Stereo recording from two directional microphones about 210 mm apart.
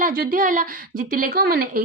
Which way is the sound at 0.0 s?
40° right (ahead or behind).